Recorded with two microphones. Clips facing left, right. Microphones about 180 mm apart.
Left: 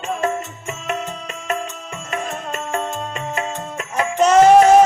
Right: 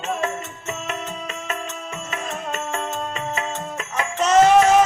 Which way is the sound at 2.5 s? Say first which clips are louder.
Left 4 dB; 10° left (ahead or behind).